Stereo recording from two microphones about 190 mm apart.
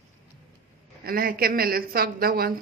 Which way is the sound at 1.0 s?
50° right (ahead or behind).